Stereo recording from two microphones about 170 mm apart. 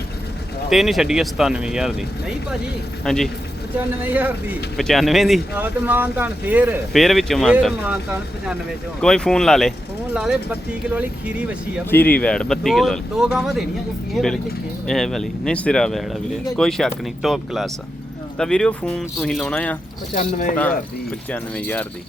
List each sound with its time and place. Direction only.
0.7 s speech: centre (ahead or behind)
3.8 s speech: 10° right (ahead or behind)
4.8 s speech: centre (ahead or behind)
5.5 s speech: 10° right (ahead or behind)
11.9 s speech: 10° left (ahead or behind)
20.1 s speech: 45° left (ahead or behind)
21.2 s speech: 10° left (ahead or behind)